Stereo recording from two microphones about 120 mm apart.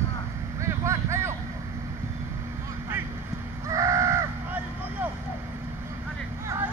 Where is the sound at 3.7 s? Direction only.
25° right (ahead or behind).